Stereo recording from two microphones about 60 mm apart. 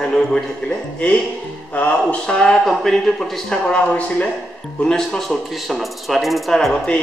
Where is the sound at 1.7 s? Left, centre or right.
Left.